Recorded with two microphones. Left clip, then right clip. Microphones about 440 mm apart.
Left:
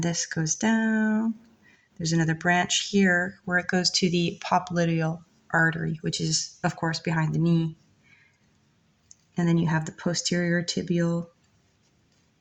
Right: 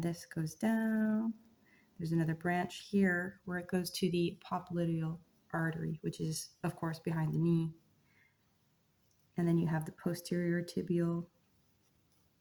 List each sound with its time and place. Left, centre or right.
0.0 s speech: right
9.3 s speech: right